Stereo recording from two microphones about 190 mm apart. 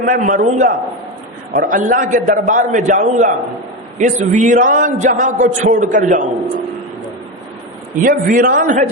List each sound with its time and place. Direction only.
0.0 s a man's voice: 45° right (ahead or behind)
8.0 s a man's voice: 45° right (ahead or behind)